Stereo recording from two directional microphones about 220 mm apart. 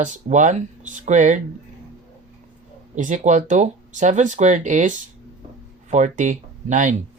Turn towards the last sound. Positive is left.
turn(degrees=-35)  # may be behind; listen again after turning